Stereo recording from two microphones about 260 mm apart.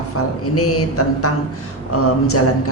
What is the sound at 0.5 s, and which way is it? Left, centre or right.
Speech, left.